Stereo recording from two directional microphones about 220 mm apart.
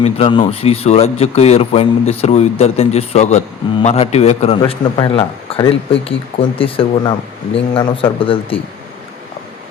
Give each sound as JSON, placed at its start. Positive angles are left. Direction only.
{"t": 0.0, "sound": "speech", "side_deg": 25}